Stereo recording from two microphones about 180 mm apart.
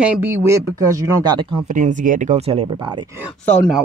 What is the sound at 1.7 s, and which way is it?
Speech, 45° right (ahead or behind).